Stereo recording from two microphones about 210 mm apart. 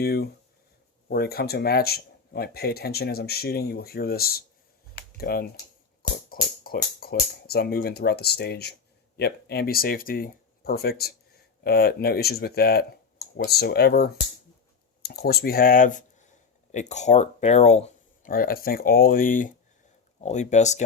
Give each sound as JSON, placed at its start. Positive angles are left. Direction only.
{"t": 0.0, "sound": "speech", "side_deg": 50}
{"t": 4.9, "sound": "a sound", "side_deg": 45}
{"t": 6.0, "sound": "speech", "side_deg": 45}